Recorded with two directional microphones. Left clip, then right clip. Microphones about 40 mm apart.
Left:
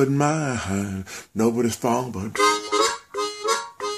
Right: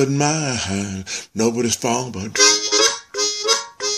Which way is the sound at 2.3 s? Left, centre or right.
Right.